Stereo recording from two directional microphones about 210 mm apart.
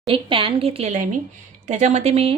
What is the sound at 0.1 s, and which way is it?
Speech, 25° right (ahead or behind).